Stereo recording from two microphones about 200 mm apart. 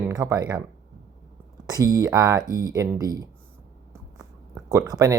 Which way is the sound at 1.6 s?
20° right (ahead or behind).